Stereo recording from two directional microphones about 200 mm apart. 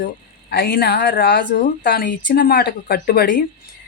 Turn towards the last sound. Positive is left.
turn(degrees=45)  # may be behind; listen again after turning